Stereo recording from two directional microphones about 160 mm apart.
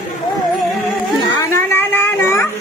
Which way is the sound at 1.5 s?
15° left (ahead or behind).